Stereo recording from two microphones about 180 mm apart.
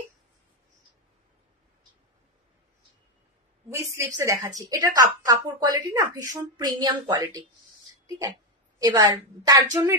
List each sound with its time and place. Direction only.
3.7 s a woman's voice: 15° right (ahead or behind)
8.7 s a woman's voice: 20° right (ahead or behind)